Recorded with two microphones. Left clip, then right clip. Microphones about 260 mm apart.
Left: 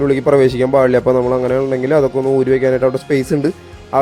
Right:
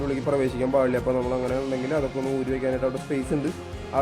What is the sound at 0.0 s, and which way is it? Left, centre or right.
A man's voice, left.